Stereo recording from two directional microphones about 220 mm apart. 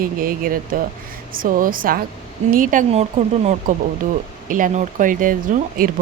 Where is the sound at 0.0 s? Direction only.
40° right (ahead or behind).